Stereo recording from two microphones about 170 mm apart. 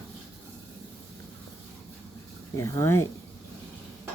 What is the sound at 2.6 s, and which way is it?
Speech, 15° left (ahead or behind).